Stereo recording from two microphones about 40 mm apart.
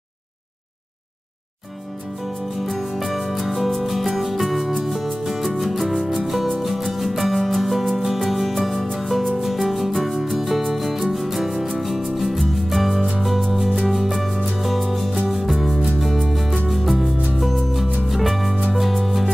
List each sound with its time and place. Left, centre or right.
2.6 s music: centre